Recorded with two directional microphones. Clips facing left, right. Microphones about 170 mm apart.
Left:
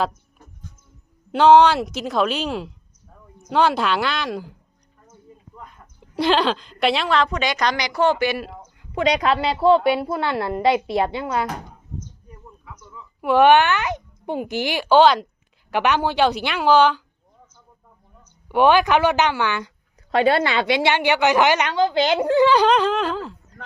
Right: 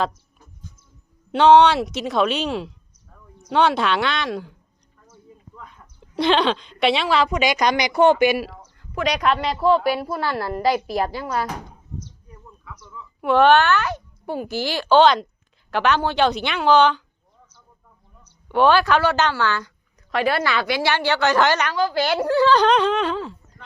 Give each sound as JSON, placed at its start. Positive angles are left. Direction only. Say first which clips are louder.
{"t": 1.3, "sound": "speech", "louder": "even", "side_deg": 5}
{"t": 6.1, "sound": "a woman's voice", "louder": "even", "side_deg": 5}
{"t": 9.0, "sound": "a woman's voice", "louder": "left 2 dB", "side_deg": 25}
{"t": 13.2, "sound": "a child's voice", "louder": "left 1 dB", "side_deg": 10}
{"t": 18.4, "sound": "a child's voice", "louder": "left 1 dB", "side_deg": 15}
{"t": 22.6, "sound": "speech", "louder": "even", "side_deg": 5}